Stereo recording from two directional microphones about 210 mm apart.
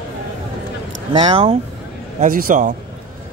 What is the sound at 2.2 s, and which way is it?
Speech, 40° right (ahead or behind).